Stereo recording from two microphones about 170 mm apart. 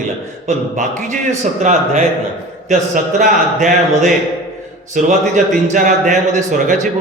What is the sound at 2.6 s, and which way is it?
Speech, 50° right (ahead or behind).